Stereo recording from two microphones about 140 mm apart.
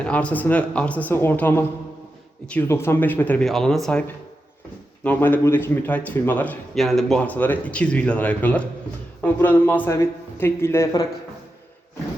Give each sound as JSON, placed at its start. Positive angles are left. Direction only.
{"t": 0.0, "sound": "speech", "side_deg": 10}
{"t": 3.4, "sound": "speech", "side_deg": 0}
{"t": 5.0, "sound": "speech", "side_deg": 15}
{"t": 6.7, "sound": "speech", "side_deg": 0}